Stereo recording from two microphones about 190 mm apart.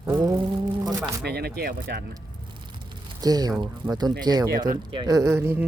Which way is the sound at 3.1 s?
20° right (ahead or behind).